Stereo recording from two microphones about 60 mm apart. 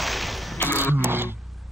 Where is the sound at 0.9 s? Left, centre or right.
Right.